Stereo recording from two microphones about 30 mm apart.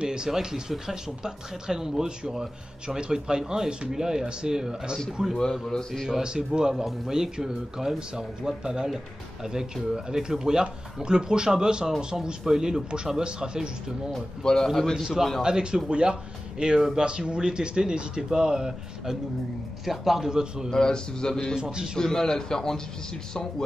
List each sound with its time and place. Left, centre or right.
0.0 s speech: right
5.4 s speech: left
6.2 s speech: right
6.7 s speech: centre
12.4 s speech: centre
12.9 s speech: right
14.4 s speech: left
15.4 s speech: right
19.8 s speech: centre
20.2 s speech: right
20.7 s speech: left
21.5 s speech: right
21.9 s speech: centre